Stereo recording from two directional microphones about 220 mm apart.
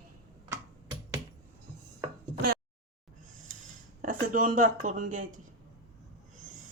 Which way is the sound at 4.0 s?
40° right (ahead or behind).